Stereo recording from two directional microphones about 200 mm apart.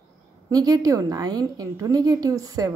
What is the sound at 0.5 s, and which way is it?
Speech, 20° right (ahead or behind).